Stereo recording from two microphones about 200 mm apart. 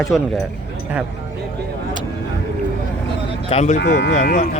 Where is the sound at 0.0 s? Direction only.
Centre (ahead or behind).